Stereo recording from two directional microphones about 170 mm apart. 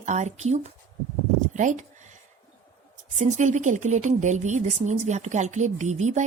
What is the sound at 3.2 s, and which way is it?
A woman's voice, 45° right (ahead or behind).